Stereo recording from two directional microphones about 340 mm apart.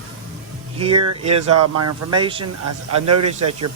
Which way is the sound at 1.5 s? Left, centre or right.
Right.